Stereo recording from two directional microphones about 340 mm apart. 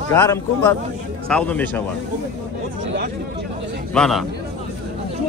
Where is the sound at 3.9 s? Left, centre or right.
Centre.